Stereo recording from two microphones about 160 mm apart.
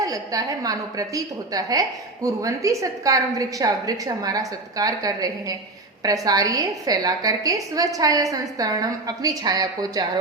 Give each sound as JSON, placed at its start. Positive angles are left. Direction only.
{"t": 0.0, "sound": "a woman's voice", "side_deg": -20}